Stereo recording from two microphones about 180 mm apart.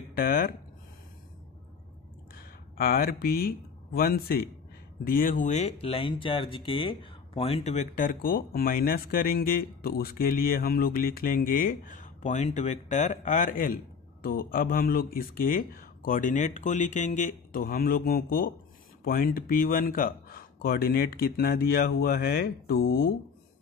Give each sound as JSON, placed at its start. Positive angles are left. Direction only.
{"t": 0.1, "sound": "speech", "side_deg": 55}
{"t": 2.8, "sound": "speech", "side_deg": 55}